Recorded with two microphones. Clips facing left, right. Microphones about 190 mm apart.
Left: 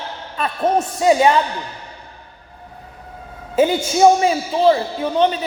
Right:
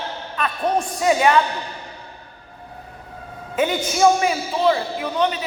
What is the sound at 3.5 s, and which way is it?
A man's voice, 30° left (ahead or behind).